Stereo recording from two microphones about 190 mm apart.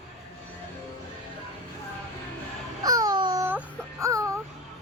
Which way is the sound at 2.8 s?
20° right (ahead or behind).